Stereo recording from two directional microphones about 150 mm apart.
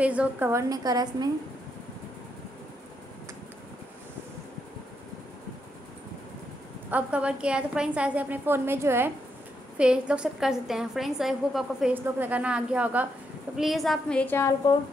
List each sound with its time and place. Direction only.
0.0 s a woman's voice: 10° right (ahead or behind); by 1.3 s 25° right (ahead or behind)
6.9 s a woman's voice: 10° right (ahead or behind); by 14.5 s 15° left (ahead or behind)